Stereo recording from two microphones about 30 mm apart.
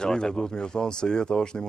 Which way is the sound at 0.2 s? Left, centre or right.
Left.